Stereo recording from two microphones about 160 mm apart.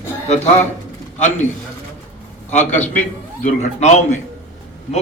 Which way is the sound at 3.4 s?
45° left (ahead or behind).